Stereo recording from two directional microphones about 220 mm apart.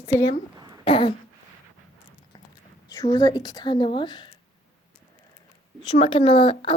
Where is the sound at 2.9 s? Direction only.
15° left (ahead or behind).